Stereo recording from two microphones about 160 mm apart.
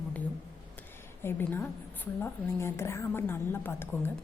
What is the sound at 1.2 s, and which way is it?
A woman's voice, 15° left (ahead or behind).